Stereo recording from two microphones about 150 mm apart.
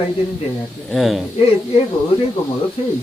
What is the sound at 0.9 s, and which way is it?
Speech, centre (ahead or behind).